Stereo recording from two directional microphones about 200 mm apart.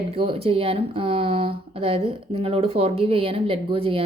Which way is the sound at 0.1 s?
30° right (ahead or behind).